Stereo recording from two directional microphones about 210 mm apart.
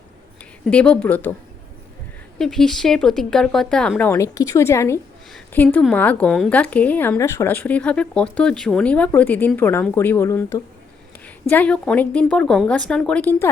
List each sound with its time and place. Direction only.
0.6 s speech: 5° left (ahead or behind)
2.4 s a woman's voice: centre (ahead or behind)